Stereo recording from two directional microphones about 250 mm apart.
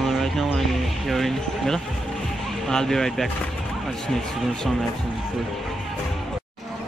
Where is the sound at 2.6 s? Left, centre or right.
Centre.